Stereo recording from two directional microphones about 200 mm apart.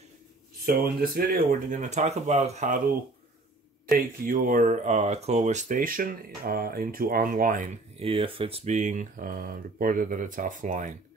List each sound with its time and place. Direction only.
0.7 s speech: 45° right (ahead or behind)
4.3 s speech: 40° right (ahead or behind)
8.1 s speech: 25° right (ahead or behind)